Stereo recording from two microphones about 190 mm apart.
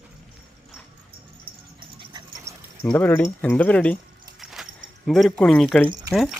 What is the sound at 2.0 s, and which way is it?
Dog, 20° right (ahead or behind).